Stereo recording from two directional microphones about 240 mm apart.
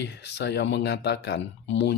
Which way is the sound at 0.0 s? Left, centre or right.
Left.